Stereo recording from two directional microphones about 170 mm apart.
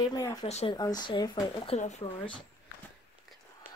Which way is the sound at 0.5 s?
40° left (ahead or behind).